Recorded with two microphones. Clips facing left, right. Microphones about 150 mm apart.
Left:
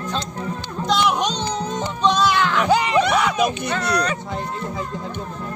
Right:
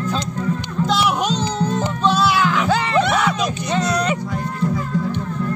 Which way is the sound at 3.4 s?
60° left (ahead or behind).